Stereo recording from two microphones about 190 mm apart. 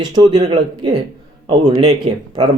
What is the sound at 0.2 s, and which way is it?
Speech, 25° right (ahead or behind).